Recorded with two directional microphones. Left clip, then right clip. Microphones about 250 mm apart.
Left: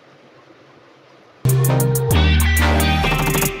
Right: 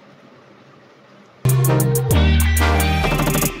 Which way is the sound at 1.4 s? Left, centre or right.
Centre.